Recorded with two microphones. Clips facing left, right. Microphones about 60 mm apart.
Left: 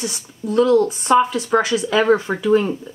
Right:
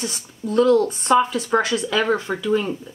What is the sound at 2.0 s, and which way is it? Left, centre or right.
Speech, centre.